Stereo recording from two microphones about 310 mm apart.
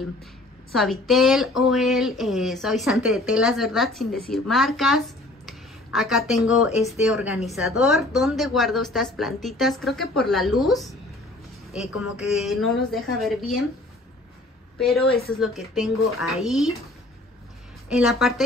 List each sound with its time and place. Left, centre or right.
0.7 s a woman's voice: centre
14.8 s a woman's voice: centre
17.8 s a woman's voice: centre